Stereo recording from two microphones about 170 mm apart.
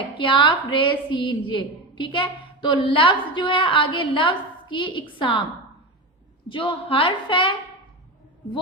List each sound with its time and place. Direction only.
0.2 s a woman's voice: 30° left (ahead or behind)
6.5 s a woman's voice: 30° left (ahead or behind)